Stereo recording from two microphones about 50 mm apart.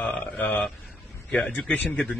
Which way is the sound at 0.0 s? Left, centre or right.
Left.